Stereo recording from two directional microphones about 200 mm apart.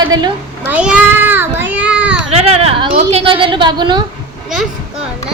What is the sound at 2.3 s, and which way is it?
A woman's voice, 30° right (ahead or behind).